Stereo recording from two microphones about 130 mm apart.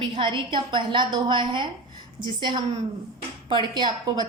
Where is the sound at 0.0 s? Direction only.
40° right (ahead or behind).